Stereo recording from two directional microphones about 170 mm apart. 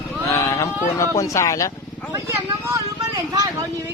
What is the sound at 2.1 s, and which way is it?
Speech, 15° right (ahead or behind).